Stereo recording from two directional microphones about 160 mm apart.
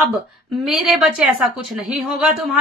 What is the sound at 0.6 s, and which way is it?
A woman's voice, centre (ahead or behind).